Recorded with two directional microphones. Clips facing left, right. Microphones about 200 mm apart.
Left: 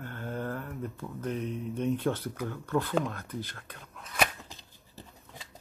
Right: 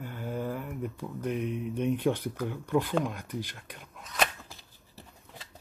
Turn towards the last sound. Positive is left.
turn(degrees=20)  # may be behind; listen again after turning